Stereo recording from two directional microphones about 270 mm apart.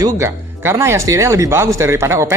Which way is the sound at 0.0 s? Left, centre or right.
Centre.